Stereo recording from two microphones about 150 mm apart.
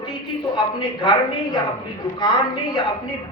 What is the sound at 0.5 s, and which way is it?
Speech, 30° left (ahead or behind).